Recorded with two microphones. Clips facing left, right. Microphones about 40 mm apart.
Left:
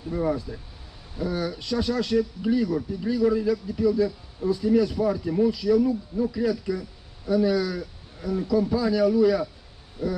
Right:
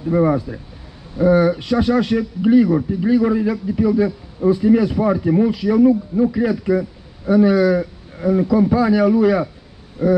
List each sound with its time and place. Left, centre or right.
0.1 s speech: right